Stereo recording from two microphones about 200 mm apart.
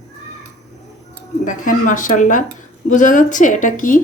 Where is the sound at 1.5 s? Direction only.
40° left (ahead or behind).